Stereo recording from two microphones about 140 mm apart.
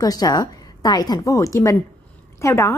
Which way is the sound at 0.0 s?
25° left (ahead or behind).